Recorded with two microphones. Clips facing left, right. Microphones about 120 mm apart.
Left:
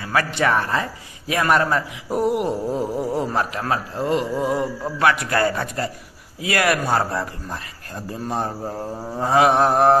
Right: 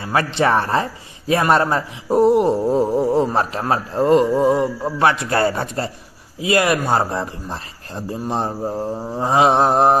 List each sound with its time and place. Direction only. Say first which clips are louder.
0.0 s a man's voice: right 3 dB; 30° right (ahead or behind)